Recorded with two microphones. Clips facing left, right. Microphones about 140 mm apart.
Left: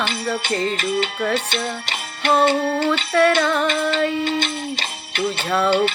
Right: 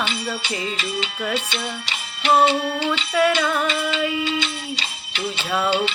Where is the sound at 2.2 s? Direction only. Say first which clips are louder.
Even; 55° left (ahead or behind).